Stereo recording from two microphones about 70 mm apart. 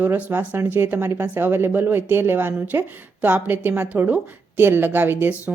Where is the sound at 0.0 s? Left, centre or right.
Right.